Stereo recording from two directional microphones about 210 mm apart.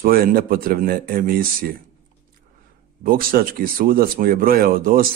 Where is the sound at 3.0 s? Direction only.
45° right (ahead or behind).